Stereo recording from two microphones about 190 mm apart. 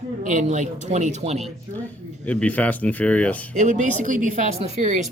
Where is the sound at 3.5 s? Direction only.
40° right (ahead or behind).